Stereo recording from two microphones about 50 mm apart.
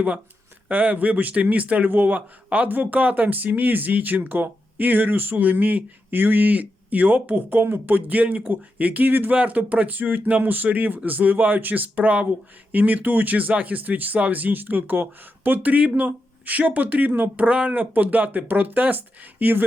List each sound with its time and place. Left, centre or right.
0.7 s speech: right
7.6 s speech: right